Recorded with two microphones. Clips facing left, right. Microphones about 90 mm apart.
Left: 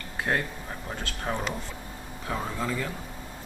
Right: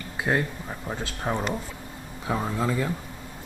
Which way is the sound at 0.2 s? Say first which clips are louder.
Right 3 dB; 15° right (ahead or behind).